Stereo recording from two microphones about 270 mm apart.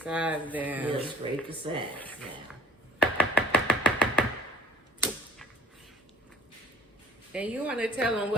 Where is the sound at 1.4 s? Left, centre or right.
Centre.